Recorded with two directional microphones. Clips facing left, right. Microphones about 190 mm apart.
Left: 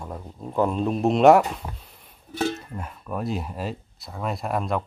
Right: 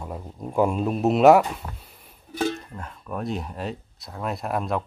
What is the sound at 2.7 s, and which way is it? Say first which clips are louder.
Speech: left 2 dB; 10° left (ahead or behind).